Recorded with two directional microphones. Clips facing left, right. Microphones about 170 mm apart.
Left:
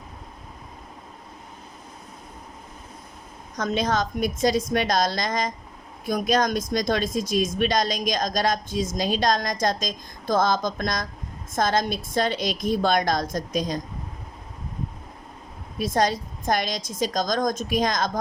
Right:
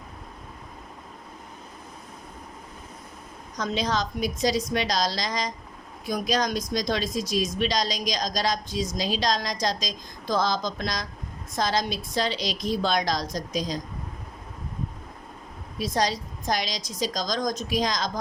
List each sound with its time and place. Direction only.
3.6 s speech: 50° left (ahead or behind)
15.8 s speech: 55° left (ahead or behind)